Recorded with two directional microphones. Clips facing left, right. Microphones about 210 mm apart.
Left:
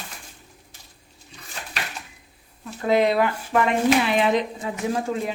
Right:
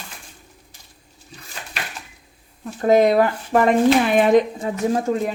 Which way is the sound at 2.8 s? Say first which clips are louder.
Right 5 dB; 45° right (ahead or behind).